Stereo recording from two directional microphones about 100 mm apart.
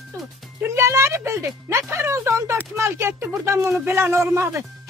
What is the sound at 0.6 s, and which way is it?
Speech, 25° right (ahead or behind).